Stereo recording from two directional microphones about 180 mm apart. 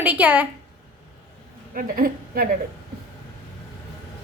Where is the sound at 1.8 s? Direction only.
55° right (ahead or behind).